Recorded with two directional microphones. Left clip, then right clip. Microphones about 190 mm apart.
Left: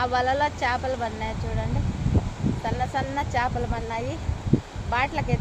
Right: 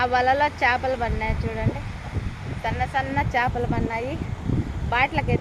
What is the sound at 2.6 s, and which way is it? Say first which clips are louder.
Speech: right 3 dB; 35° right (ahead or behind).